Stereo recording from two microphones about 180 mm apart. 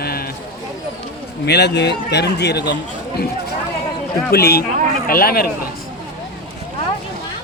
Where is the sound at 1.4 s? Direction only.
70° left (ahead or behind).